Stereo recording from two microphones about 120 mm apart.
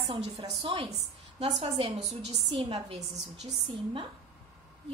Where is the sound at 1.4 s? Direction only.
55° right (ahead or behind).